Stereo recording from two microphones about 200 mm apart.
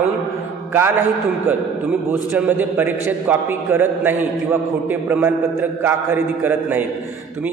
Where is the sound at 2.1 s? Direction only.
10° right (ahead or behind).